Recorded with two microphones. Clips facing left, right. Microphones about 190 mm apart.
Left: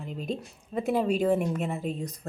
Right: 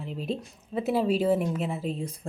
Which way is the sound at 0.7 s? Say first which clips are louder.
Right 1 dB; 5° right (ahead or behind).